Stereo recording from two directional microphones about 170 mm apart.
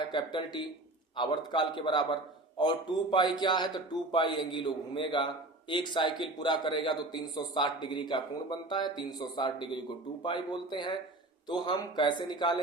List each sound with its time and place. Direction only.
0.1 s a man's voice: 25° left (ahead or behind)